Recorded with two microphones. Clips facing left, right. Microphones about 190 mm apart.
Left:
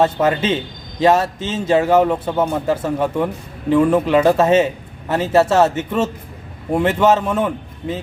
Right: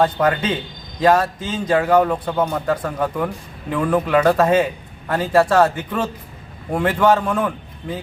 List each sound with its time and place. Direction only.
0.0 s a man's voice: 25° left (ahead or behind)